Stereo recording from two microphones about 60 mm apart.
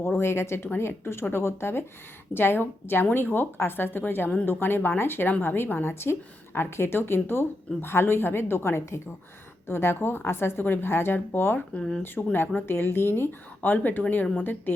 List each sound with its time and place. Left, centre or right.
0.0 s speech: left
11.8 s speech: centre
12.0 s speech: left